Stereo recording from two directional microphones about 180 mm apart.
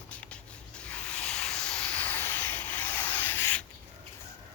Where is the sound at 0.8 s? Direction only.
5° left (ahead or behind).